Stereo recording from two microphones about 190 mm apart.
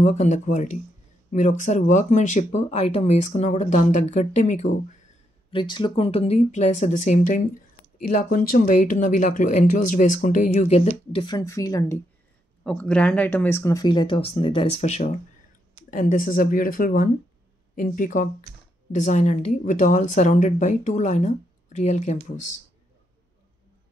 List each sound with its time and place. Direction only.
0.0 s speech: 35° left (ahead or behind)
5.5 s speech: 25° left (ahead or behind)
12.6 s speech: 5° left (ahead or behind); by 22.2 s 35° left (ahead or behind)